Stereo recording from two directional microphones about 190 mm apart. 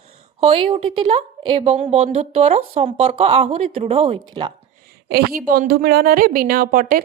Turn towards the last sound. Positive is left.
turn(degrees=-50)  # may be behind; listen again after turning